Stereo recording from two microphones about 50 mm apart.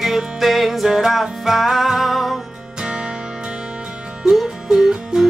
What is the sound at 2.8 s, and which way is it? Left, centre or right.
Music, centre.